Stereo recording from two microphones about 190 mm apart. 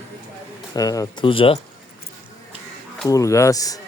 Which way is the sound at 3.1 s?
15° left (ahead or behind).